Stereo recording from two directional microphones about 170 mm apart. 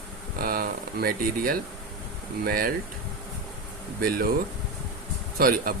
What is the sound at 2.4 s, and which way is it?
Speech, 60° right (ahead or behind).